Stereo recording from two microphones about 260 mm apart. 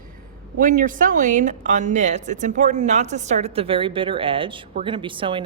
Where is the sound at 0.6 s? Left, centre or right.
Right.